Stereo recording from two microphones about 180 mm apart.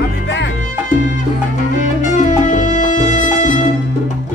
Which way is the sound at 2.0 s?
45° left (ahead or behind).